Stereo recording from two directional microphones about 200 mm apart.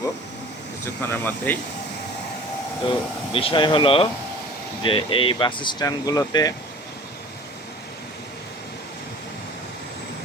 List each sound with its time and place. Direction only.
1.0 s speech: 10° left (ahead or behind)
3.3 s speech: 25° left (ahead or behind)